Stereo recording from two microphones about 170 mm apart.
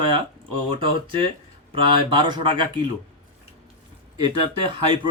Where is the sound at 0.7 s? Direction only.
30° right (ahead or behind).